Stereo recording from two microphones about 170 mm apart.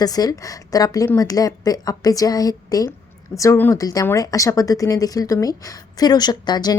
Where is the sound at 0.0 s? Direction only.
20° left (ahead or behind).